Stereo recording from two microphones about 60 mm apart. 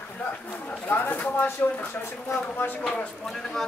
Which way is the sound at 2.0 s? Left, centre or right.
Left.